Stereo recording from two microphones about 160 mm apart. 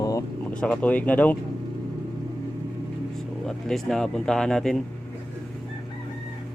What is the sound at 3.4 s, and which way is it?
Speech, centre (ahead or behind).